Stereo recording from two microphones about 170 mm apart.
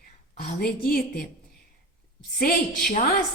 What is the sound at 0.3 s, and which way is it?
Speech, 60° left (ahead or behind).